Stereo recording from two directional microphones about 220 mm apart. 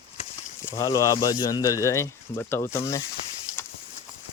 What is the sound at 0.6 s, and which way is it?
Speech, 15° left (ahead or behind).